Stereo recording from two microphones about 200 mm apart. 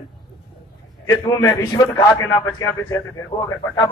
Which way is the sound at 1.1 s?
15° left (ahead or behind).